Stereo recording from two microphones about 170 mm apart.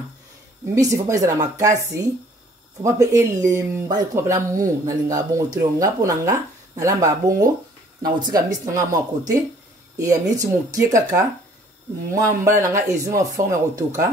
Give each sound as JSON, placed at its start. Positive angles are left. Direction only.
{"t": 0.7, "sound": "a man's voice", "side_deg": -20}
{"t": 2.8, "sound": "a man's voice", "side_deg": -20}